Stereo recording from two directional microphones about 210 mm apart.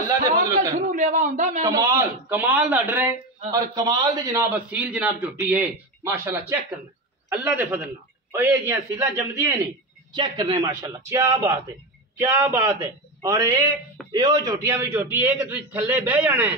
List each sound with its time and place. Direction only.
0.1 s a man's voice: 15° right (ahead or behind)
0.7 s a man's voice: 35° right (ahead or behind)
1.6 s a man's voice: 15° right (ahead or behind)
4.6 s a man's voice: 5° right (ahead or behind); by 10.7 s 25° right (ahead or behind)
10.8 s a man's voice: 10° right (ahead or behind)